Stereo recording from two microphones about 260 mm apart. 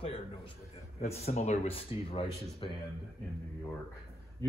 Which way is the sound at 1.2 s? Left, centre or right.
Left.